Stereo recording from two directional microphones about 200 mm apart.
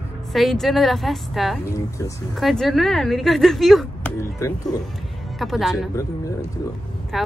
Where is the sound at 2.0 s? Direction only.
15° left (ahead or behind).